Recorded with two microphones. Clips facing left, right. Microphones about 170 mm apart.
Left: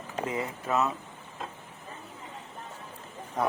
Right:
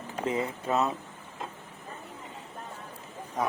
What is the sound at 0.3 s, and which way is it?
Speech, 25° right (ahead or behind).